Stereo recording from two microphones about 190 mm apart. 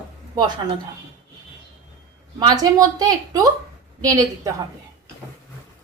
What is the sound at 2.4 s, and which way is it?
Speech, 20° right (ahead or behind).